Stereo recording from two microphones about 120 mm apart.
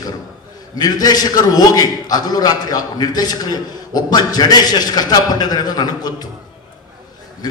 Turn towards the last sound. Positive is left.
turn(degrees=35)  # may be behind; listen again after turning